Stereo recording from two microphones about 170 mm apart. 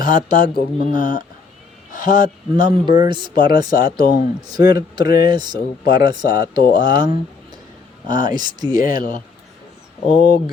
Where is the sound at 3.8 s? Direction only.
55° left (ahead or behind).